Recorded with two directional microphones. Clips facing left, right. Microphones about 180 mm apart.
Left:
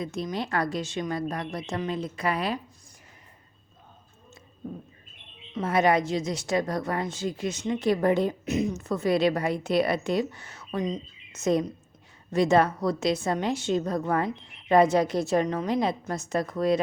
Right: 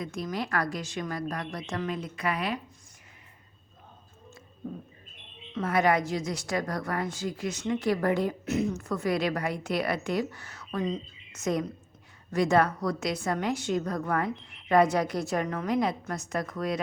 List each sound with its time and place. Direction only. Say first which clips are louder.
0.0 s a woman's voice: left 2 dB; 25° left (ahead or behind)
5.5 s a woman's voice: left 2 dB; 20° left (ahead or behind)